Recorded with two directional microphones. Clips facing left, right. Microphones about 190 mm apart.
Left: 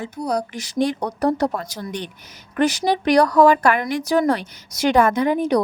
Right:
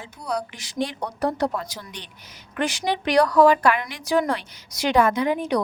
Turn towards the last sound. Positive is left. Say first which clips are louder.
# left 4 dB
turn(degrees=40)  # may be behind; listen again after turning